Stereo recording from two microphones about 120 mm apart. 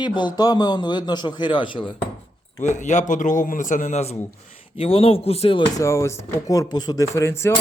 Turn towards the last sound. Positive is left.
turn(degrees=20)  # may be behind; listen again after turning